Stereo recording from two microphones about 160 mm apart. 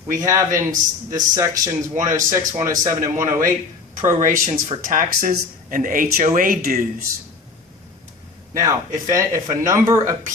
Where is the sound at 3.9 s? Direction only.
55° right (ahead or behind).